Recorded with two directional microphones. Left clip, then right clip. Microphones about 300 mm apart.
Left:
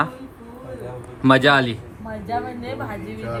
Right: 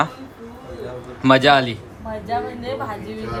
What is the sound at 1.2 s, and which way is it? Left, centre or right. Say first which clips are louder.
A woman's voice: right 1 dB; centre.